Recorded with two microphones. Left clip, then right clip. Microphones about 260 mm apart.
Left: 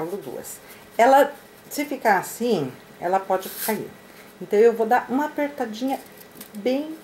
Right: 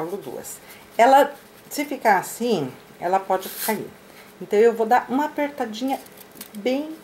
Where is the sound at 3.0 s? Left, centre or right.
Centre.